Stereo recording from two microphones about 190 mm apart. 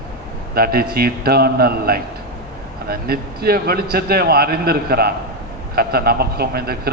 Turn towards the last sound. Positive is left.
turn(degrees=-55)  # may be behind; listen again after turning